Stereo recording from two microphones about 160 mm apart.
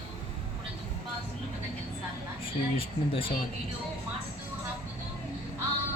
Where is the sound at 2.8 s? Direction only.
35° left (ahead or behind).